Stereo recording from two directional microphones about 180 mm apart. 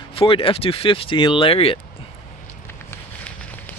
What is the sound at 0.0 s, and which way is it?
Speech, 30° left (ahead or behind).